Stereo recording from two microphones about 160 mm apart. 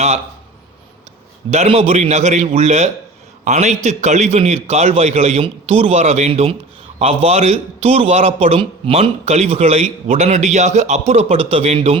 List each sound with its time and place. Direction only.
1.5 s a man's voice: 40° right (ahead or behind)